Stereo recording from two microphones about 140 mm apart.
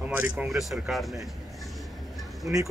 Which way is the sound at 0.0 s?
10° right (ahead or behind).